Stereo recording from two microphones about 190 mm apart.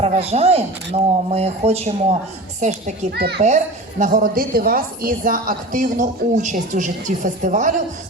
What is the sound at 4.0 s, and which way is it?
A woman's voice, 45° right (ahead or behind).